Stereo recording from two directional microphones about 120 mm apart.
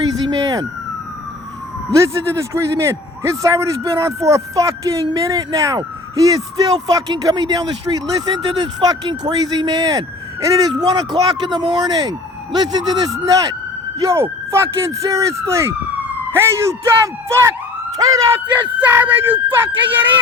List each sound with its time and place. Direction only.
0.3 s police car: 30° right (ahead or behind)
1.9 s a man's voice: 25° right (ahead or behind)
18.8 s speech: 15° right (ahead or behind)